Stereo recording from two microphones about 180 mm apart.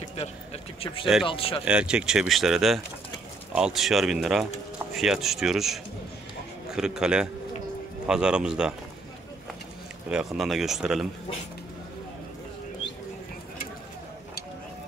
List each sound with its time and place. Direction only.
0.1 s a sound: 35° left (ahead or behind)
1.2 s speech: 30° left (ahead or behind)
1.6 s speech: 5° right (ahead or behind)
10.0 s speech: 5° right (ahead or behind)